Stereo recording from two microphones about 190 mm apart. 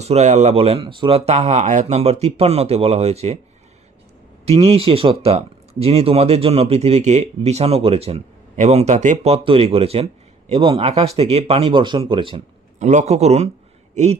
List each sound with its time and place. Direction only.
0.0 s speech: 35° right (ahead or behind)
4.4 s speech: 30° right (ahead or behind)
12.8 s speech: 40° right (ahead or behind)